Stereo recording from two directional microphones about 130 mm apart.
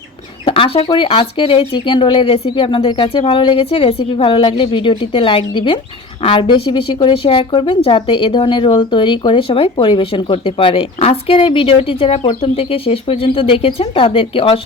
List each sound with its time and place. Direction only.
0.4 s a woman's voice: 45° left (ahead or behind)